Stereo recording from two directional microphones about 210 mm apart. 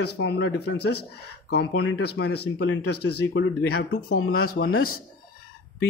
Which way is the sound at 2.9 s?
90° left.